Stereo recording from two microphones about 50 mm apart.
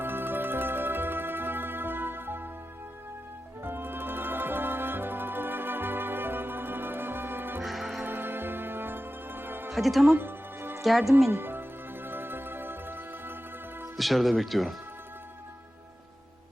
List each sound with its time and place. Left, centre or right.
0.0 s music: right
3.6 s music: right
7.6 s music: centre
8.0 s music: right
9.7 s speech: centre
10.2 s music: right
11.3 s a woman's voice: right
12.0 s music: right
13.9 s speech: centre